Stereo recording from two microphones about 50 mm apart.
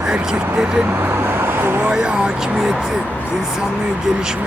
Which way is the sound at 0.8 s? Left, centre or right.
Right.